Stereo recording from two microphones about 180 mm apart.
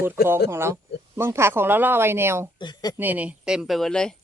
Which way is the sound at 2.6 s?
25° left (ahead or behind).